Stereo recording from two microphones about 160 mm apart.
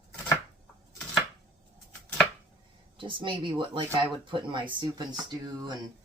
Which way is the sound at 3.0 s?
30° right (ahead or behind).